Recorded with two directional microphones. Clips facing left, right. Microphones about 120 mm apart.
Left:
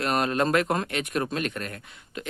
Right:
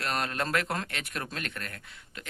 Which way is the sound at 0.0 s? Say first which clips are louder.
Left 7 dB; 20° left (ahead or behind).